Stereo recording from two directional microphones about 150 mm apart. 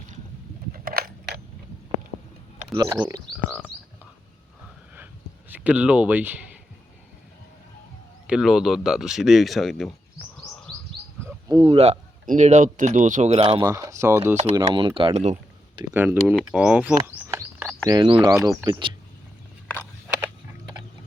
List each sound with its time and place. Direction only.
0.7 s a sound: 75° right (ahead or behind)
2.7 s speech: 25° right (ahead or behind)
5.5 s speech: 10° right (ahead or behind)
8.3 s speech: 5° right (ahead or behind)
11.4 s speech: 30° right (ahead or behind)
12.2 s speech: 55° right (ahead or behind)
13.6 s speech: 20° right (ahead or behind)
14.5 s speech: 30° right (ahead or behind); by 15.4 s 45° right (ahead or behind)
15.9 s speech: 15° right (ahead or behind)
17.0 s a sound: 15° right (ahead or behind)
17.8 s speech: 30° right (ahead or behind)